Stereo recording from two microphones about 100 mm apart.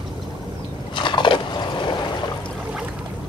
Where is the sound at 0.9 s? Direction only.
50° left (ahead or behind).